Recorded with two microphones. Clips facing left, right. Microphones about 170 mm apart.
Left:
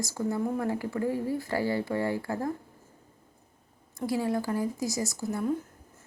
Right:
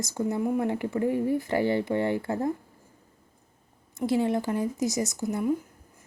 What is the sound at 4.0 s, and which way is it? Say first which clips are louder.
Speech: right 4 dB; 25° right (ahead or behind).